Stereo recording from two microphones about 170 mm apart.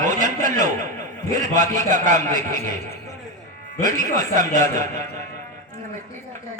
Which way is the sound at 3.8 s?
50° right (ahead or behind).